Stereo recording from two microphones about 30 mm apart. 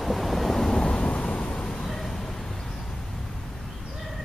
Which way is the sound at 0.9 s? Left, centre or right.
Left.